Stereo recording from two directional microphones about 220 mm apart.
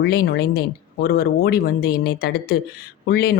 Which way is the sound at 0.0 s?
45° left (ahead or behind).